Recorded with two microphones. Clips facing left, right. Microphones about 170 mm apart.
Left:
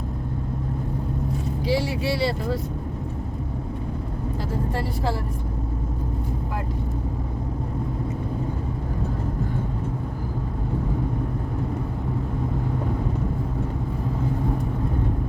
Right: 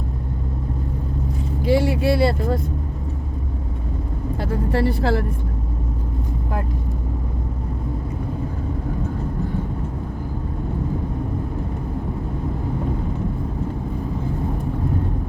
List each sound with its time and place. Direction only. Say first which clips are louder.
1.6 s speech: right 6 dB; 55° right (ahead or behind)
4.7 s speech: right 7 dB; 70° right (ahead or behind)